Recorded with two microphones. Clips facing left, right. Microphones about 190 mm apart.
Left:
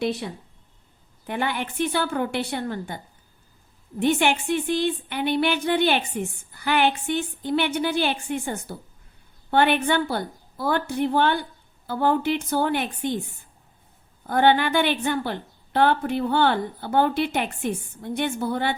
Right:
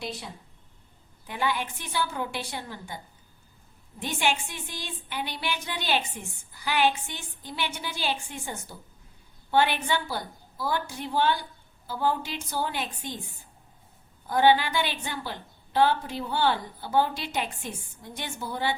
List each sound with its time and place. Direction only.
0.0 s a woman's voice: 65° left (ahead or behind)
1.3 s a woman's voice: 60° left (ahead or behind)
4.0 s a woman's voice: 60° left (ahead or behind)
14.3 s a woman's voice: 60° left (ahead or behind)